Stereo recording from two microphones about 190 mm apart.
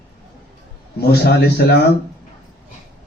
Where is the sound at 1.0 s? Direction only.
60° left (ahead or behind).